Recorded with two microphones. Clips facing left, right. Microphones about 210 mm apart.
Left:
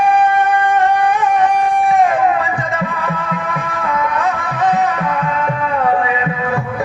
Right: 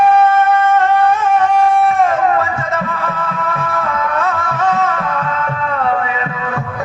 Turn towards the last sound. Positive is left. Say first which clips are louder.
# left 1 dB
turn(degrees=15)  # may be behind; listen again after turning